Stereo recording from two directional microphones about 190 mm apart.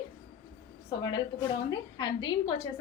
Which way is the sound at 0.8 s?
25° left (ahead or behind).